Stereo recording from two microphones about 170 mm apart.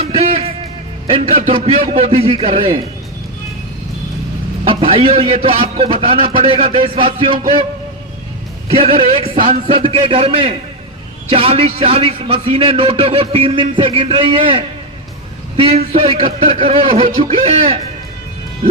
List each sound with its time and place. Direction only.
0.0 s music: 35° right (ahead or behind)
1.0 s a man's voice: 35° right (ahead or behind)
4.6 s a man's voice: 30° right (ahead or behind)
8.7 s a man's voice: 35° right (ahead or behind)